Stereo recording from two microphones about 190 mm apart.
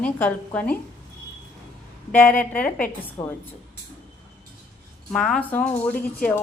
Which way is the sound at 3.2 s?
20° left (ahead or behind).